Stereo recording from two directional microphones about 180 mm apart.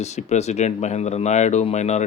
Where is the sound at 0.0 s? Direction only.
40° left (ahead or behind).